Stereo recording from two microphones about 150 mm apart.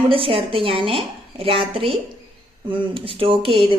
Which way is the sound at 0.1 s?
35° right (ahead or behind).